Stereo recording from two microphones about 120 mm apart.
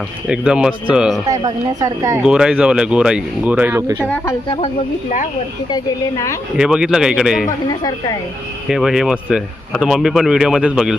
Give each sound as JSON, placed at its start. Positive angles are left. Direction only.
{"t": 0.3, "sound": "speech", "side_deg": -5}
{"t": 1.3, "sound": "speech", "side_deg": -25}
{"t": 2.2, "sound": "speech", "side_deg": -5}
{"t": 5.7, "sound": "a woman's voice", "side_deg": 25}
{"t": 6.6, "sound": "speech", "side_deg": -5}
{"t": 8.6, "sound": "speech", "side_deg": -5}